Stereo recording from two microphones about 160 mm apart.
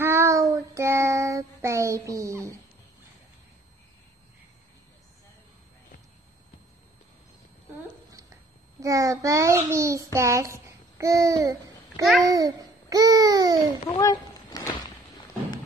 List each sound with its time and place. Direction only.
0.0 s child singing: 15° right (ahead or behind)
8.1 s a child's voice: 20° right (ahead or behind)
12.3 s babbling: 25° right (ahead or behind)
13.8 s cat: 25° left (ahead or behind)